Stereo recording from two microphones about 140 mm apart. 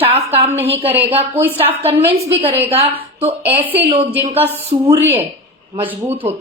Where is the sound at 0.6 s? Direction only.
45° right (ahead or behind).